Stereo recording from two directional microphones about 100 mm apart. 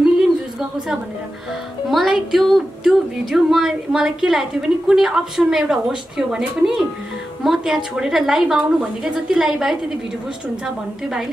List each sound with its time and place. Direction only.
1.9 s speech: centre (ahead or behind)